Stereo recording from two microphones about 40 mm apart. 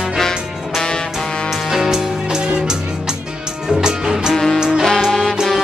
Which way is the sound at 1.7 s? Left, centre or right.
Centre.